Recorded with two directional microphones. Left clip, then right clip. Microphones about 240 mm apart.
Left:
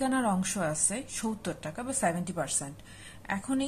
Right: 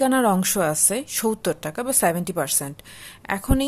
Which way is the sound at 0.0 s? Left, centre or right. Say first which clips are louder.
Right 10 dB; right.